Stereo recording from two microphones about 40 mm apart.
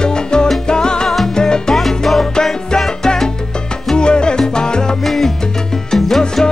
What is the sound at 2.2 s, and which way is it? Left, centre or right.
Salsa music, centre.